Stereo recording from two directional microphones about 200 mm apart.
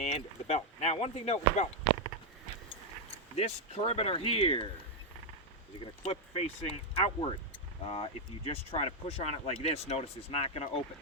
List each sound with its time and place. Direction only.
0.0 s speech: 35° left (ahead or behind)
2.6 s speech: 30° left (ahead or behind)
6.0 s speech: 30° left (ahead or behind)